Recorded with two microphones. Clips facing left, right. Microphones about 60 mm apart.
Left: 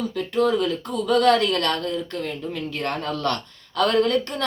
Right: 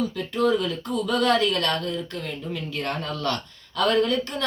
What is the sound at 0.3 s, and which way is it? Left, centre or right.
Speech, left.